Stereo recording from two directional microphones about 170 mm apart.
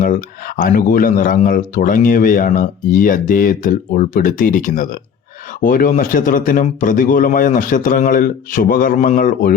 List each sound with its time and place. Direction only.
0.0 s speech: 55° left (ahead or behind)